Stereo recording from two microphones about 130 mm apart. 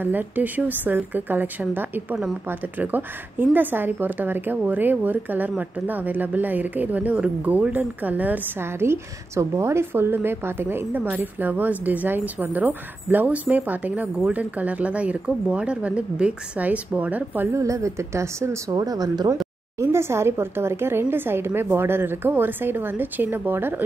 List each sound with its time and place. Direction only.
0.0 s a woman's voice: 15° right (ahead or behind)